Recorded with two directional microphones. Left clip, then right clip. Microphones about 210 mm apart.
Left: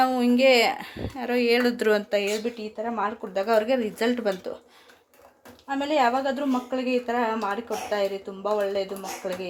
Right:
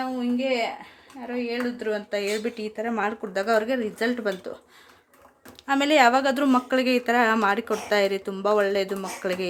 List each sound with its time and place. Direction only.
0.0 s speech: 40° left (ahead or behind)
2.0 s speech: 10° left (ahead or behind)
2.3 s speech: 10° right (ahead or behind)
2.7 s speech: 25° right (ahead or behind)
3.4 s speech: 5° right (ahead or behind)
5.6 s speech: 30° right (ahead or behind)